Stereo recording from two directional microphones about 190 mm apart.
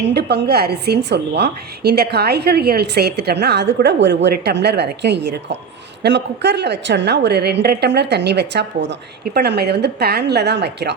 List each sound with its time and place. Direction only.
0.0 s a woman's voice: 60° right (ahead or behind)